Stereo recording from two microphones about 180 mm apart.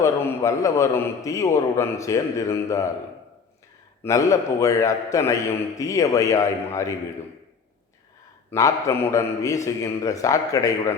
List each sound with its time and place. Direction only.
0.0 s a man's voice: 15° left (ahead or behind)
4.0 s a man's voice: 15° left (ahead or behind)
8.4 s a man's voice: 15° left (ahead or behind)